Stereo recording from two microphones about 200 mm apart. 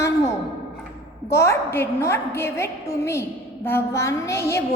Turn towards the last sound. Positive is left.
turn(degrees=15)  # may be behind; listen again after turning